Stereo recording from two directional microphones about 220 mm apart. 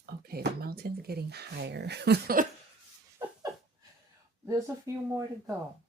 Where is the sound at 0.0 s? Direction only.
45° right (ahead or behind).